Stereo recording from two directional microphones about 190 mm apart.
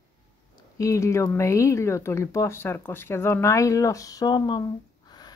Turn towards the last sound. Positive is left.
turn(degrees=20)  # may be behind; listen again after turning